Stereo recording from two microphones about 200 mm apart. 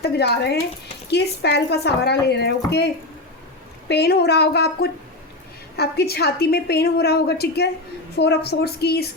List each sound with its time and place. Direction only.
0.0 s a woman's voice: 55° left (ahead or behind)